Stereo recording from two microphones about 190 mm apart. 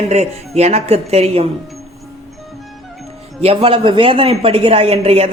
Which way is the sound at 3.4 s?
30° right (ahead or behind).